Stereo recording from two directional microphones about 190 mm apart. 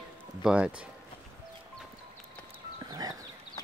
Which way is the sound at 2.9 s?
20° right (ahead or behind).